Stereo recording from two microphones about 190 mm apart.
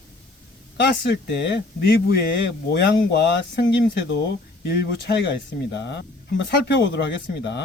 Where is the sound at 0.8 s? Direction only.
60° left (ahead or behind).